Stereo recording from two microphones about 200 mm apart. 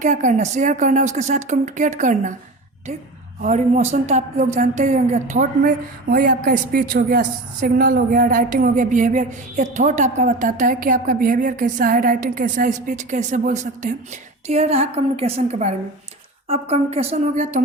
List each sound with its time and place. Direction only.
0.0 s a woman's voice: 40° right (ahead or behind)
3.4 s a woman's voice: 35° right (ahead or behind)